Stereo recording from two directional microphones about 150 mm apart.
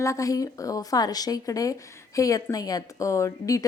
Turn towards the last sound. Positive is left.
turn(degrees=20)  # may be behind; listen again after turning